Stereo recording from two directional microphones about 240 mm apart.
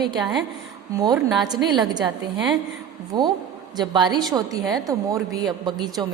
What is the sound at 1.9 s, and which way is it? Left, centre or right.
A woman's voice, centre.